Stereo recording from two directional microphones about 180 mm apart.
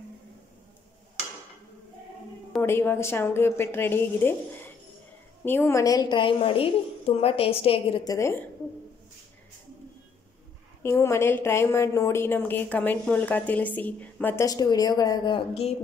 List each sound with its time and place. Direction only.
2.6 s a woman's voice: 15° left (ahead or behind)
10.8 s a woman's voice: 15° left (ahead or behind)